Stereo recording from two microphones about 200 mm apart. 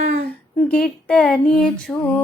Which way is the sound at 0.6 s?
5° left (ahead or behind).